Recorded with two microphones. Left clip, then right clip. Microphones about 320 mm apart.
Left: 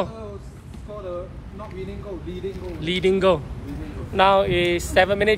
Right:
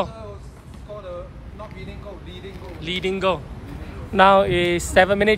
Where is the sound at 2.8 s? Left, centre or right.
Centre.